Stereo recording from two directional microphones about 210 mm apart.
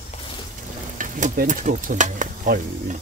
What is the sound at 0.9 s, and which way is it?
Stir, 40° right (ahead or behind).